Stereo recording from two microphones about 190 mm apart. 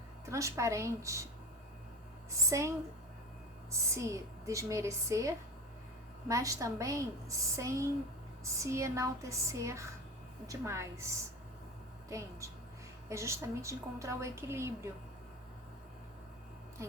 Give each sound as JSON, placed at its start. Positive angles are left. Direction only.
{"t": 0.3, "sound": "a woman's voice", "side_deg": -15}
{"t": 2.3, "sound": "a woman's voice", "side_deg": -15}